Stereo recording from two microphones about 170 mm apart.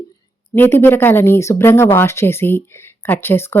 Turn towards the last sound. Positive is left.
turn(degrees=15)  # may be behind; listen again after turning